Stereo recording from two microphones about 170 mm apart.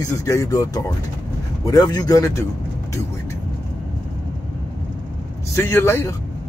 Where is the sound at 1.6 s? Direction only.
20° left (ahead or behind).